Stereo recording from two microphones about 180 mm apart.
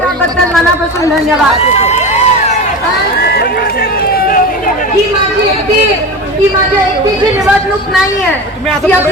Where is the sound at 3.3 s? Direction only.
55° left (ahead or behind).